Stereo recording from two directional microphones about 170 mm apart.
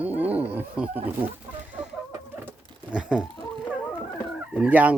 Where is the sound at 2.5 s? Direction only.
5° right (ahead or behind).